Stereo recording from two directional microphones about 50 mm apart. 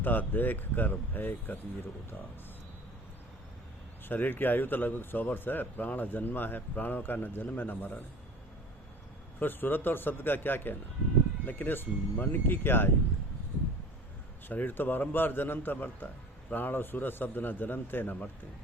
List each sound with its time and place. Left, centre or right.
0.0 s a man's voice: left
4.1 s a man's voice: left
9.4 s a man's voice: left
14.4 s a man's voice: left